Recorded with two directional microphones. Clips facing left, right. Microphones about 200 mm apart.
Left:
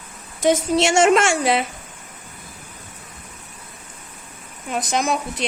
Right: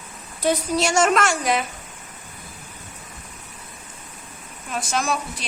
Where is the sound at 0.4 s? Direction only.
25° left (ahead or behind).